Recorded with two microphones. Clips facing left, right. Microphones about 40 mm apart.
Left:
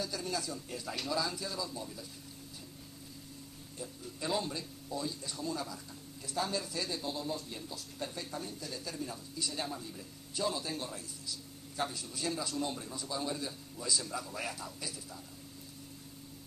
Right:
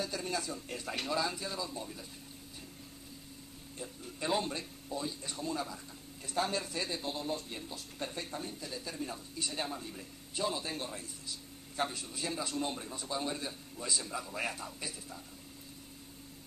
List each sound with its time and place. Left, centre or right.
0.0 s a man's voice: right
3.7 s a man's voice: right
4.8 s speech: right
5.2 s a man's voice: right
12.2 s speech: right
12.4 s a man's voice: right